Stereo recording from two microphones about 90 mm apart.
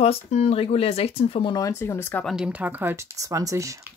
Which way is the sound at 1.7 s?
30° left (ahead or behind).